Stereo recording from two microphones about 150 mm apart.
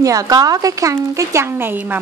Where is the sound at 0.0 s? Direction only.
20° right (ahead or behind).